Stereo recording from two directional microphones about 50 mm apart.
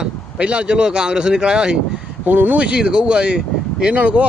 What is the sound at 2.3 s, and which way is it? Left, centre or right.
Speech, right.